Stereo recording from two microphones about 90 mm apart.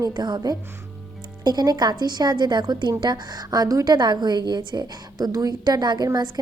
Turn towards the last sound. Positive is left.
turn(degrees=-50)  # may be behind; listen again after turning